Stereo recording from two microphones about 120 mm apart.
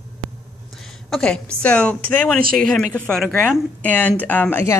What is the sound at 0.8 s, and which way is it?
A woman's voice, 5° left (ahead or behind).